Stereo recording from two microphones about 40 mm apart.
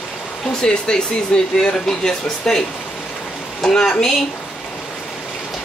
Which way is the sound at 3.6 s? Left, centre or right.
Centre.